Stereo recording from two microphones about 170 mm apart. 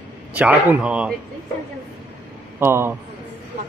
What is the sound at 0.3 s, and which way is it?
Speech, 10° right (ahead or behind).